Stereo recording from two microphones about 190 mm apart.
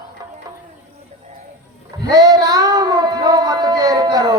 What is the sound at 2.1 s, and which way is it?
Child singing, 20° right (ahead or behind).